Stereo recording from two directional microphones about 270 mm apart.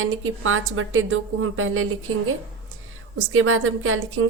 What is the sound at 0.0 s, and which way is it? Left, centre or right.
A woman's voice, right.